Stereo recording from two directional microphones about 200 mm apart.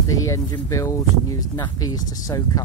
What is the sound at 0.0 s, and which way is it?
Speech, 15° left (ahead or behind).